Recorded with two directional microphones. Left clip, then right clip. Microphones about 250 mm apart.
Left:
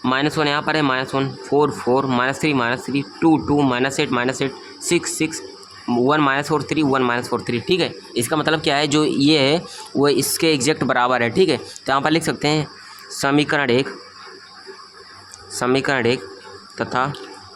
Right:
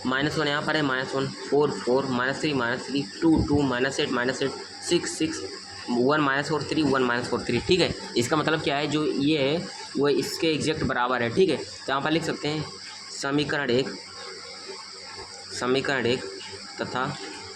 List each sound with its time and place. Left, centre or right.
0.0 s speech: left
15.5 s speech: left